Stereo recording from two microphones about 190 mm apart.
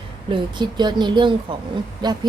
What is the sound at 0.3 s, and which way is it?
A woman's voice, 25° right (ahead or behind).